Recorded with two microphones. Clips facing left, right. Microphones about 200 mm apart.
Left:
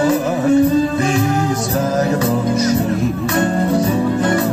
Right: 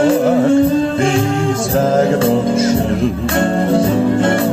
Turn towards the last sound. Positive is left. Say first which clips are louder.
# right 2 dB
turn(degrees=-30)  # may be behind; listen again after turning